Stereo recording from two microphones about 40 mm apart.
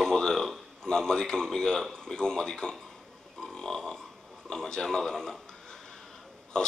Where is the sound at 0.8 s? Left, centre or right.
Centre.